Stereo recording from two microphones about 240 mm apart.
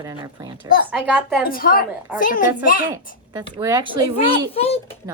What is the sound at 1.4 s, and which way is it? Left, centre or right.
Speech, left.